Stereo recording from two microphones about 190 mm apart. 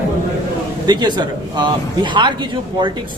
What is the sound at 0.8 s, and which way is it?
Speech, 25° right (ahead or behind).